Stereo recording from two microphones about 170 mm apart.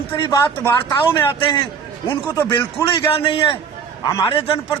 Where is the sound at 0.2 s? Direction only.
15° left (ahead or behind).